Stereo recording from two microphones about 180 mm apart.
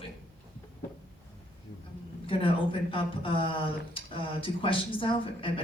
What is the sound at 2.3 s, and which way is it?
Speech, 30° left (ahead or behind).